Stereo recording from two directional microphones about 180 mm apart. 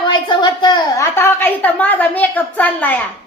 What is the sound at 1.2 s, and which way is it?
A woman's voice, 10° left (ahead or behind).